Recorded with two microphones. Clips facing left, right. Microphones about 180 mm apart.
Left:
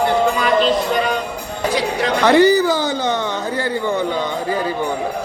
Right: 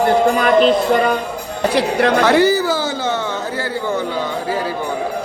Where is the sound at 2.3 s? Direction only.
5° right (ahead or behind).